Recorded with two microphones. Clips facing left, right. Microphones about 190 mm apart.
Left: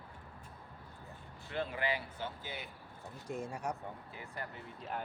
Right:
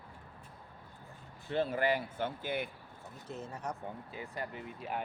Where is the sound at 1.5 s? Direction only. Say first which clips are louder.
Right 6 dB; 40° right (ahead or behind); by 2.7 s 55° right (ahead or behind).